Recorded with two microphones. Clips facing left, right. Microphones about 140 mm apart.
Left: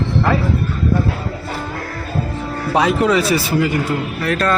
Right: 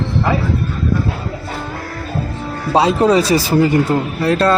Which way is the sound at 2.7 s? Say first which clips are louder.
Right 3 dB; 30° right (ahead or behind).